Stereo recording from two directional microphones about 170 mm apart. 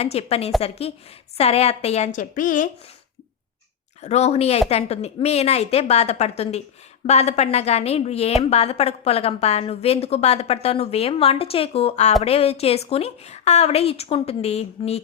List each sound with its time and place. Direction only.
0.0 s a woman's voice: 35° left (ahead or behind)
4.0 s a woman's voice: 40° left (ahead or behind)